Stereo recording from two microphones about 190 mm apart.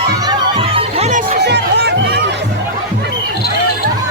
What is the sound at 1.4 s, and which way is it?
Music, 60° right (ahead or behind).